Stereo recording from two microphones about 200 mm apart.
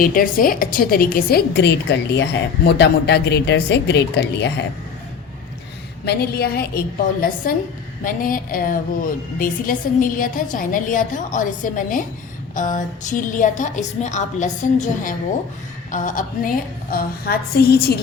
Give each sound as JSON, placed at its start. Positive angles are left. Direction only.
{"t": 0.0, "sound": "a woman's voice", "side_deg": 45}
{"t": 6.1, "sound": "a woman's voice", "side_deg": 50}